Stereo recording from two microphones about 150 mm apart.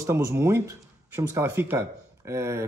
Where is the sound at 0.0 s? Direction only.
20° right (ahead or behind).